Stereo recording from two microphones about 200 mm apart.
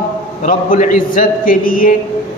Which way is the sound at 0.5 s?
40° left (ahead or behind).